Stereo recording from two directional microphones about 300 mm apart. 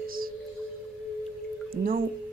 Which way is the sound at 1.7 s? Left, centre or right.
Right.